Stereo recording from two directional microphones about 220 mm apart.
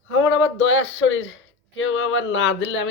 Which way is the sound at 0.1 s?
60° left (ahead or behind).